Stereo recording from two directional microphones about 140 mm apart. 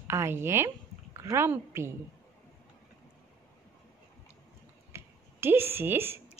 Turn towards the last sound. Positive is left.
turn(degrees=-15)  # may be behind; listen again after turning